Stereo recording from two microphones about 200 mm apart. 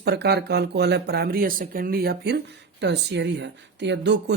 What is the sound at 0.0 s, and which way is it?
Speech, 55° right (ahead or behind).